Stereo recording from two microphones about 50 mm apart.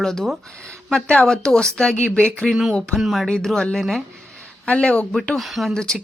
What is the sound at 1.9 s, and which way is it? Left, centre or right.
Speech, left.